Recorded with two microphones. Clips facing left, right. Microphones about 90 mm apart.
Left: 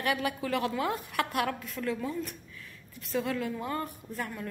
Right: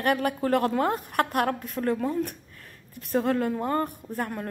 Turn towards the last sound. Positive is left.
turn(degrees=-55)  # may be behind; listen again after turning